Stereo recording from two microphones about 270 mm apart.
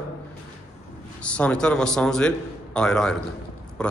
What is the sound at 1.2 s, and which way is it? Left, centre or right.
A man's voice, centre.